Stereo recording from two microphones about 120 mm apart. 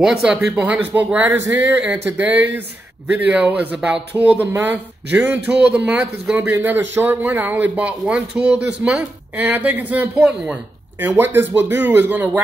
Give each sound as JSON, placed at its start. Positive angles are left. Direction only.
{"t": 0.0, "sound": "speech", "side_deg": -5}